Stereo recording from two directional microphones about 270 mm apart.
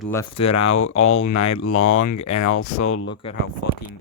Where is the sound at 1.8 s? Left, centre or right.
Left.